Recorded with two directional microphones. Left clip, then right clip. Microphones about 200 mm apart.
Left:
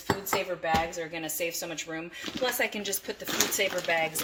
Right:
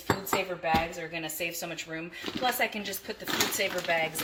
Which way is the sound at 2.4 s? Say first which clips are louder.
Even; 45° left (ahead or behind).